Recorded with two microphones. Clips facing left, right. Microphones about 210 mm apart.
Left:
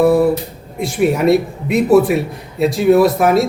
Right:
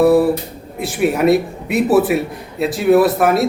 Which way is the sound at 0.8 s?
Centre (ahead or behind).